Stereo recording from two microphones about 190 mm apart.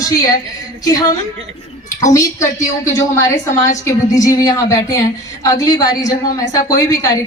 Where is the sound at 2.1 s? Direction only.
15° left (ahead or behind).